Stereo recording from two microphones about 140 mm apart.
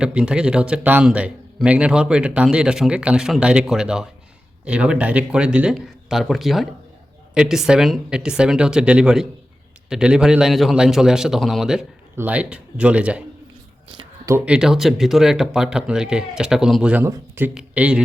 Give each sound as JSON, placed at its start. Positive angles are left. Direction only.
{"t": 0.0, "sound": "speech", "side_deg": -5}
{"t": 14.4, "sound": "speech", "side_deg": -5}
{"t": 17.0, "sound": "speech", "side_deg": -15}
{"t": 17.5, "sound": "speech", "side_deg": -5}